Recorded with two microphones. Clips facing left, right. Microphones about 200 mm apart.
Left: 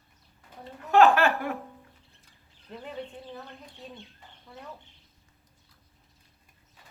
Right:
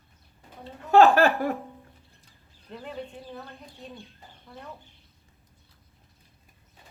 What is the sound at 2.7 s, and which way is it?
Speech, centre (ahead or behind).